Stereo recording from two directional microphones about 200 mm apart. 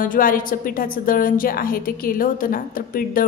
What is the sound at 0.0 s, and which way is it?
A woman's voice, 45° left (ahead or behind).